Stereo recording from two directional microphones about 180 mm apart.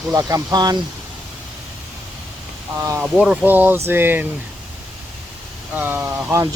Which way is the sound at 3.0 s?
5° right (ahead or behind).